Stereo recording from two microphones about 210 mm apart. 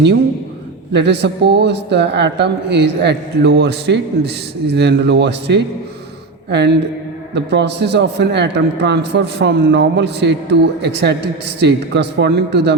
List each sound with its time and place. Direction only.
0.9 s speech: 55° right (ahead or behind)